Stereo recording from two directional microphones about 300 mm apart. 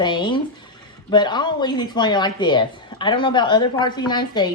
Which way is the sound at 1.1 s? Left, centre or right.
Centre.